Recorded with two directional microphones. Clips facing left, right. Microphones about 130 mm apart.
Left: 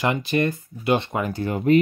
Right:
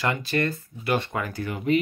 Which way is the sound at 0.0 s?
20° left (ahead or behind).